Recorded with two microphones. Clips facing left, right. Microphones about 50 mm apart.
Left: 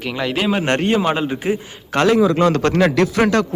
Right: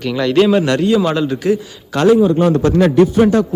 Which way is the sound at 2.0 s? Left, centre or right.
Left.